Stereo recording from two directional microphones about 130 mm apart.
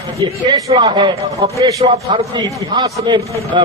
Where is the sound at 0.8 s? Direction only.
35° right (ahead or behind).